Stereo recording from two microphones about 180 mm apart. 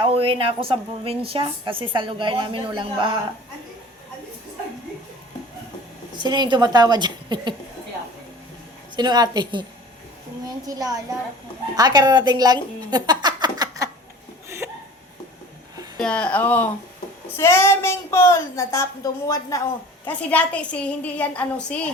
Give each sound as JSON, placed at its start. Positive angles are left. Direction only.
{"t": 0.0, "sound": "a woman's voice", "side_deg": -30}
{"t": 6.1, "sound": "a woman's voice", "side_deg": -25}
{"t": 9.0, "sound": "a woman's voice", "side_deg": -25}
{"t": 10.7, "sound": "a woman's voice", "side_deg": -20}
{"t": 16.0, "sound": "speech", "side_deg": 5}